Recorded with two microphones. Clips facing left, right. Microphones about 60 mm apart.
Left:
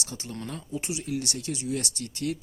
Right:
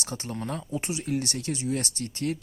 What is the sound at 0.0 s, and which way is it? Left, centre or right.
Speech, right.